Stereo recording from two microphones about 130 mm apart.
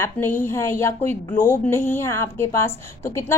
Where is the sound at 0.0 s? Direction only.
15° left (ahead or behind).